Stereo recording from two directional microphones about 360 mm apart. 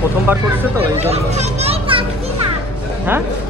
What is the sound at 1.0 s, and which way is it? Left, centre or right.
A child's voice, centre.